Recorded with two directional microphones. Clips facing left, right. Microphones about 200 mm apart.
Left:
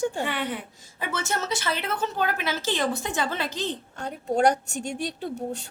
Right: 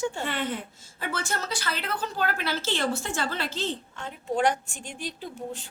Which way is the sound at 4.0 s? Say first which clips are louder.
Left 4 dB; 40° left (ahead or behind).